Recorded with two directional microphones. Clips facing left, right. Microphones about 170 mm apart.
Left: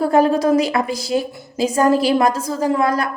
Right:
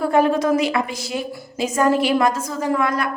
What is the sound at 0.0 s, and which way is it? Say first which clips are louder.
A woman's voice: left 2 dB; 35° left (ahead or behind).